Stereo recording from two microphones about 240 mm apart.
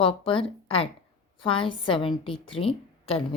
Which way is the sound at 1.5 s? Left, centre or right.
Left.